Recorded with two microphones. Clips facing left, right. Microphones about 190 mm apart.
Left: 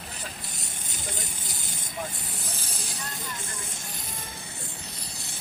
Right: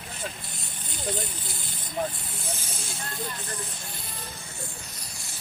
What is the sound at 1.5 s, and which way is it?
Speech, 40° left (ahead or behind).